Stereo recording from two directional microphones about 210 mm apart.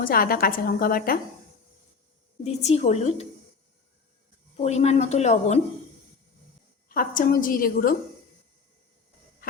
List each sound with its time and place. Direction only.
0.0 s a woman's voice: 45° left (ahead or behind)
2.4 s a woman's voice: 30° left (ahead or behind)
4.5 s a woman's voice: 30° left (ahead or behind)
6.8 s a woman's voice: 40° left (ahead or behind)